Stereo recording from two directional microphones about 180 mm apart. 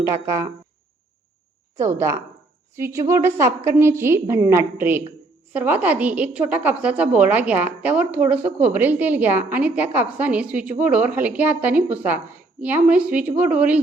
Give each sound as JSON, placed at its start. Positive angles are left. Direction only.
{"t": 0.0, "sound": "a woman's voice", "side_deg": -15}
{"t": 1.7, "sound": "a woman's voice", "side_deg": -15}